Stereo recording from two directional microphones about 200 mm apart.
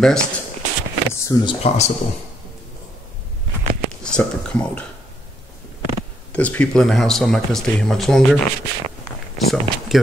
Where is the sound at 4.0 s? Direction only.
5° left (ahead or behind).